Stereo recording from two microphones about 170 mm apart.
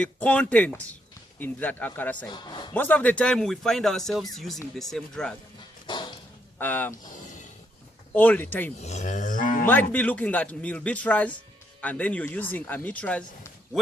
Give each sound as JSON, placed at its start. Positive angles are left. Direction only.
{"t": 0.0, "sound": "speech", "side_deg": 5}
{"t": 2.2, "sound": "a man's voice", "side_deg": 25}
{"t": 2.7, "sound": "speech", "side_deg": 10}
{"t": 5.8, "sound": "dog", "side_deg": 25}
{"t": 6.6, "sound": "speech", "side_deg": 10}
{"t": 7.0, "sound": "a sound", "side_deg": 50}
{"t": 8.1, "sound": "speech", "side_deg": 10}
{"t": 8.8, "sound": "livestock", "side_deg": 45}
{"t": 9.9, "sound": "speech", "side_deg": 10}